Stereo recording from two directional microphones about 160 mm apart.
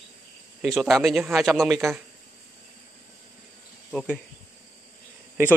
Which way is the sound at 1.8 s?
15° right (ahead or behind).